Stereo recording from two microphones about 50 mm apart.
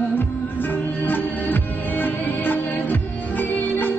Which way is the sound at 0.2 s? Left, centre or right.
Left.